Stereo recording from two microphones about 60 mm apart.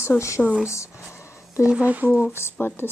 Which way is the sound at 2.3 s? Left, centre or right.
Left.